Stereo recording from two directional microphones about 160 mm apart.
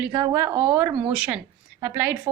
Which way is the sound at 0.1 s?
20° right (ahead or behind).